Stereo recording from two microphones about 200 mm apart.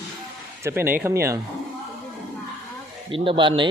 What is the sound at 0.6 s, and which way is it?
Speech, 10° right (ahead or behind).